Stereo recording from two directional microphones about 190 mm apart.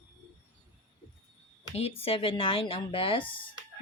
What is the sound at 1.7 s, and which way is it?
Speech, 30° left (ahead or behind).